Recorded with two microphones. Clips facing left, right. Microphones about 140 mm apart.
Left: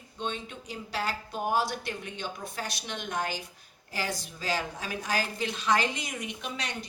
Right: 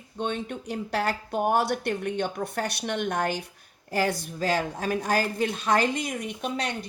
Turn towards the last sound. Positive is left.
turn(degrees=-55)  # may be behind; listen again after turning